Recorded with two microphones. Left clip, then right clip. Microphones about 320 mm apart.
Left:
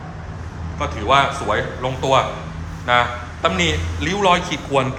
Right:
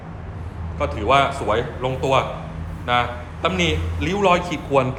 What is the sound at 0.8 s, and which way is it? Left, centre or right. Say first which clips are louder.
A man's voice: left 1 dB; centre.